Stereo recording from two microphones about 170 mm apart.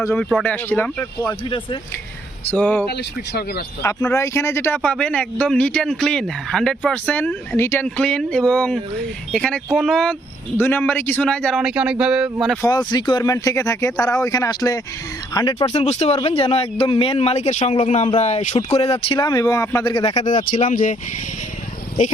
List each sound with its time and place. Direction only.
0.2 s speech: 5° right (ahead or behind)
0.4 s speech: 10° left (ahead or behind)
1.3 s speech: 30° left (ahead or behind)
2.5 s speech: 10° left (ahead or behind)
2.9 s speech: 70° left (ahead or behind)
3.8 s speech: 15° left (ahead or behind); by 12.5 s 5° right (ahead or behind)
12.6 s speech: 25° left (ahead or behind)
15.5 s speech: 40° left (ahead or behind)
19.3 s speech: 20° left (ahead or behind)
19.9 s speech: 30° left (ahead or behind)
20.2 s speech: 50° left (ahead or behind)